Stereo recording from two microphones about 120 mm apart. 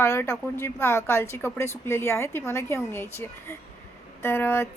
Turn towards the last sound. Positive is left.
turn(degrees=20)  # may be behind; listen again after turning